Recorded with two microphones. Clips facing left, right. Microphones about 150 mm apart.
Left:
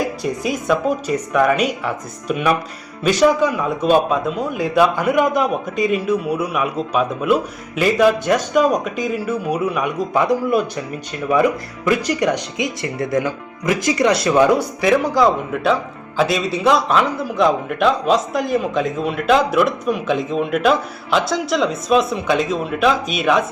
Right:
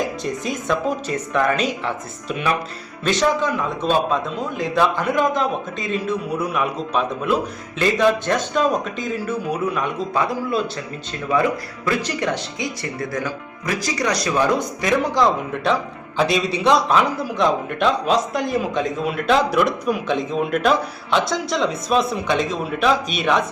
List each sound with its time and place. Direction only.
0.2 s speech: 5° left (ahead or behind)
11.9 s speech: 15° left (ahead or behind)
14.8 s a man's voice: 5° left (ahead or behind)